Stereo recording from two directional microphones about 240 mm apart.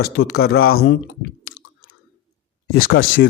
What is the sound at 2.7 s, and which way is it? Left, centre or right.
Speech, left.